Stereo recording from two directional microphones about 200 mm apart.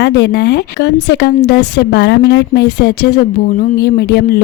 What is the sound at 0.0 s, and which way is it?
Speech, 60° left (ahead or behind).